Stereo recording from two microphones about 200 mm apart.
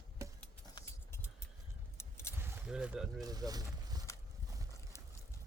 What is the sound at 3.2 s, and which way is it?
Speech, 20° right (ahead or behind).